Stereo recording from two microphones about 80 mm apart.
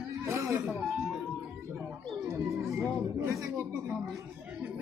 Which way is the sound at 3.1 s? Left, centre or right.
Right.